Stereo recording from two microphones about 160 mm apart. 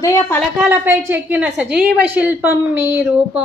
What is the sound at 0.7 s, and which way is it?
A woman's voice, 10° right (ahead or behind).